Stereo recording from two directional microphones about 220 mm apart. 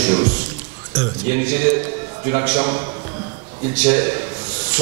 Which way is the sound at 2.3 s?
10° right (ahead or behind).